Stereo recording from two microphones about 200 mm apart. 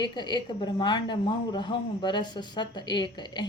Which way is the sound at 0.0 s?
20° left (ahead or behind).